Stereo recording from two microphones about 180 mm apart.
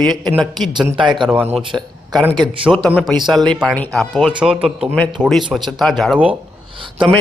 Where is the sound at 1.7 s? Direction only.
15° right (ahead or behind).